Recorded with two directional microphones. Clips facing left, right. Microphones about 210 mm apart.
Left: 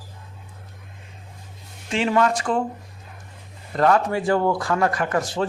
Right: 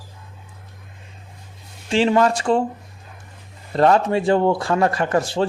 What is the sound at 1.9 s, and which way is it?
Speech, 30° right (ahead or behind).